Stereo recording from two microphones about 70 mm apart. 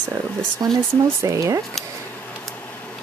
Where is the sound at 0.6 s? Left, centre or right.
Right.